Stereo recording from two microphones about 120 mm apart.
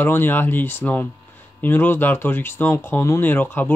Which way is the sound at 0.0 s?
20° left (ahead or behind).